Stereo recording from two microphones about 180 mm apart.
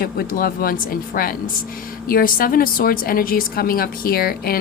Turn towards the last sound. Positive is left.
turn(degrees=55)  # may be behind; listen again after turning